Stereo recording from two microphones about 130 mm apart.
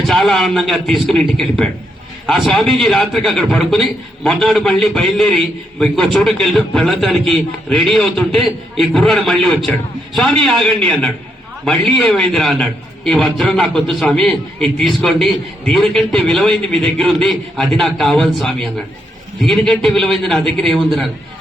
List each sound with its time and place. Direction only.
0.0 s a man's voice: centre (ahead or behind)